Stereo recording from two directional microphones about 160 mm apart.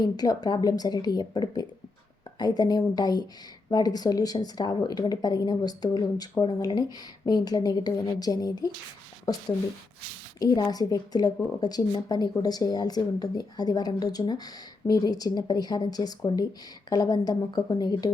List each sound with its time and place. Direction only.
0.0 s a woman's voice: 25° left (ahead or behind)
10.4 s a woman's voice: 25° left (ahead or behind)